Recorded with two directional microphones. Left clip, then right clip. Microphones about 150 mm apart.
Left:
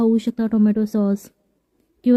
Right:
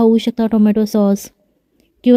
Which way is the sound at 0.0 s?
30° right (ahead or behind).